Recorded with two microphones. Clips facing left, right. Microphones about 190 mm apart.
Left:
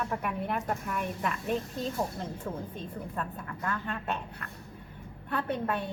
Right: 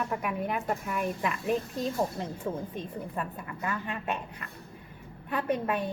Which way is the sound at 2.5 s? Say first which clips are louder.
Right 4 dB; 20° right (ahead or behind).